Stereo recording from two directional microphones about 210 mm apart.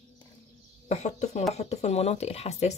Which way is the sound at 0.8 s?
35° left (ahead or behind).